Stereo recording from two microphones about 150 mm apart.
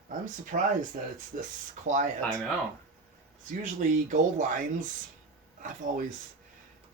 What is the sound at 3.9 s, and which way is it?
Speech, 55° right (ahead or behind).